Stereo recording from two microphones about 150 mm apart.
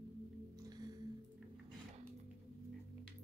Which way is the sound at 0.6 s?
25° right (ahead or behind).